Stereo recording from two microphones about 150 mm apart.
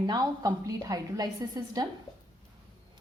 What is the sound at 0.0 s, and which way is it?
A woman's voice, 25° right (ahead or behind).